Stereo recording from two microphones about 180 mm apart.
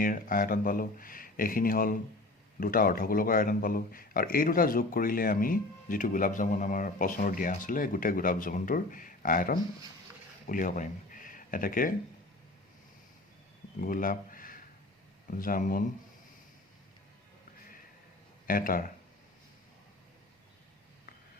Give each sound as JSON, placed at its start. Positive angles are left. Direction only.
{"t": 0.0, "sound": "speech", "side_deg": 50}
{"t": 13.8, "sound": "speech", "side_deg": 50}
{"t": 18.4, "sound": "speech", "side_deg": 50}